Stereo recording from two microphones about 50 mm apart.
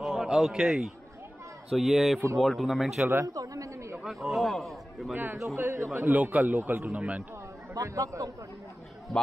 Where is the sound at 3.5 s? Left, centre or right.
Right.